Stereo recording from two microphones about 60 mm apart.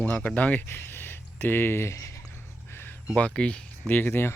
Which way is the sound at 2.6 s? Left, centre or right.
Left.